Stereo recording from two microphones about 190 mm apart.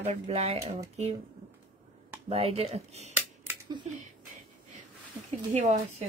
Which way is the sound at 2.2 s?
30° right (ahead or behind).